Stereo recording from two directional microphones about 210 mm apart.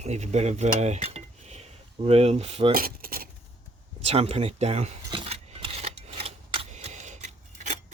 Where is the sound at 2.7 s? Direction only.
45° right (ahead or behind).